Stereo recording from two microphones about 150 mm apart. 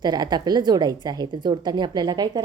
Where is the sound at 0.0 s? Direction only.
25° right (ahead or behind).